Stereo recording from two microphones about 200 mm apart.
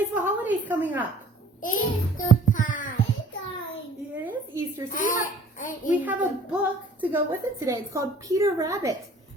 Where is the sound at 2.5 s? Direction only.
40° left (ahead or behind).